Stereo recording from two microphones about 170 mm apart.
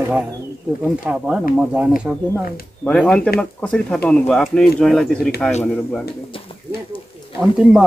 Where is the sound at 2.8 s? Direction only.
5° left (ahead or behind).